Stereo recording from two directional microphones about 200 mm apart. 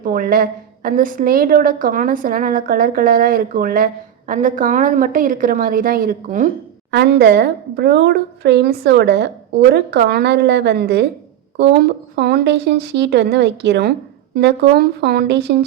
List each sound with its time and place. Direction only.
0.0 s a woman's voice: 45° right (ahead or behind)
6.9 s speech: 55° right (ahead or behind)